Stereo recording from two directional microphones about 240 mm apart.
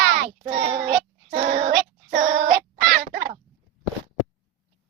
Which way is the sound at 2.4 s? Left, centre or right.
Right.